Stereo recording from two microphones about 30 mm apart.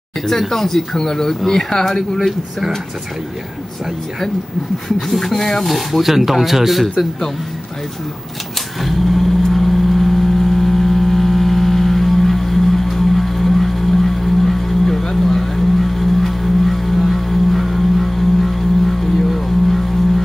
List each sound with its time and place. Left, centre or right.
0.3 s speech: centre
4.8 s speech: centre
5.7 s speech: centre
8.8 s vehicle: centre
15.2 s music: centre